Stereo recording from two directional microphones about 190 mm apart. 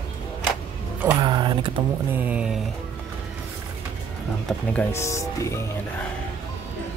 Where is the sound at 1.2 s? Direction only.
25° right (ahead or behind).